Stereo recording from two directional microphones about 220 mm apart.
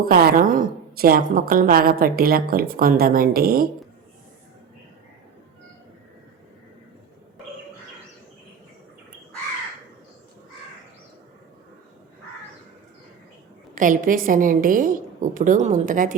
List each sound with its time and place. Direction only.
0.1 s a woman's voice: 40° right (ahead or behind)
13.7 s a woman's voice: 35° right (ahead or behind)